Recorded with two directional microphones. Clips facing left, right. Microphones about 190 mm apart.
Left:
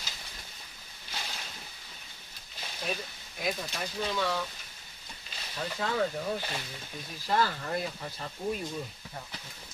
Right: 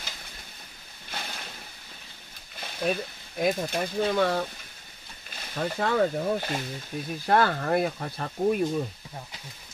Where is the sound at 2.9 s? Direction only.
55° right (ahead or behind).